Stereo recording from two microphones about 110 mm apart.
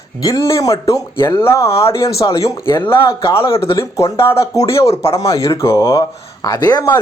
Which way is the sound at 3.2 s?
50° left (ahead or behind).